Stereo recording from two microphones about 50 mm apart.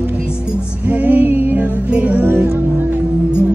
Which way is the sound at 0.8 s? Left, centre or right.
Right.